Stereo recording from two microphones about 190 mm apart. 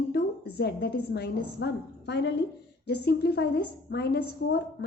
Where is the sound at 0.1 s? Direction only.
55° left (ahead or behind).